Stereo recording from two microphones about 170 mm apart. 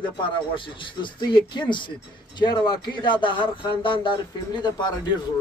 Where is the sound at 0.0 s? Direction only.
30° left (ahead or behind).